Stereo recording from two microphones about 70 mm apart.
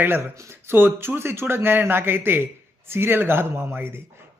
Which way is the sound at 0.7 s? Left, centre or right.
Right.